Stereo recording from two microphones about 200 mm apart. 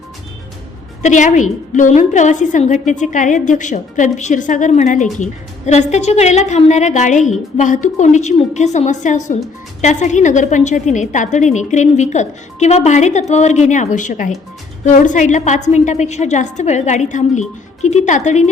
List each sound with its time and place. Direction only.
1.0 s a woman's voice: 40° left (ahead or behind)